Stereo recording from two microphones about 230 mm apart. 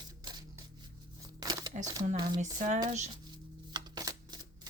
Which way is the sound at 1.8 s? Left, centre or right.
Centre.